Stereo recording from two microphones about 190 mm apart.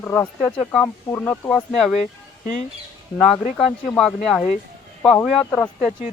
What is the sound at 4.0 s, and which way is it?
Speech, centre (ahead or behind).